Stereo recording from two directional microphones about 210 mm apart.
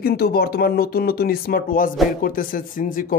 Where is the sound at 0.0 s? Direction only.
45° left (ahead or behind).